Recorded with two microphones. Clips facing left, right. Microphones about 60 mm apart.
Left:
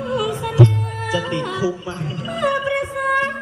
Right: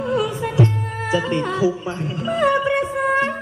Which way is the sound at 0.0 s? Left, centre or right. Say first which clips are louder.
Right 1 dB; right.